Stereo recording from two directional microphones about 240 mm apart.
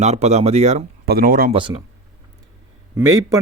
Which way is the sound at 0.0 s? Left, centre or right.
Right.